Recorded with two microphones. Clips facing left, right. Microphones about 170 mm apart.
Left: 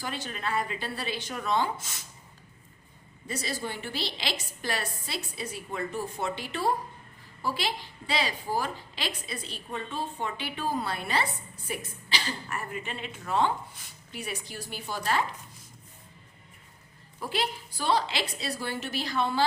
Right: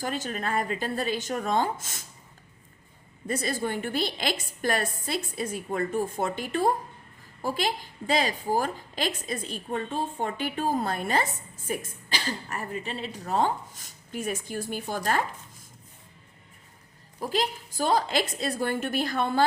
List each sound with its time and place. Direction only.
0.0 s a woman's voice: 45° right (ahead or behind)
3.2 s a woman's voice: 50° right (ahead or behind)
17.2 s a woman's voice: 40° right (ahead or behind)